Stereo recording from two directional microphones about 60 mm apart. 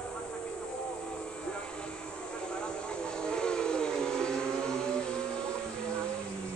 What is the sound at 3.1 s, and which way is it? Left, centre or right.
Vehicle, centre.